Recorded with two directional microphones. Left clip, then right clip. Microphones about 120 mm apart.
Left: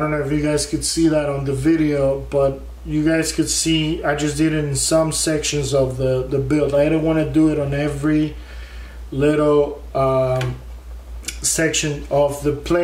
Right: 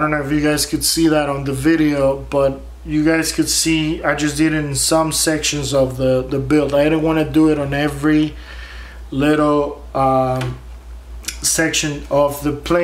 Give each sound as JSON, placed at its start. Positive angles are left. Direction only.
{"t": 0.0, "sound": "a man's voice", "side_deg": -20}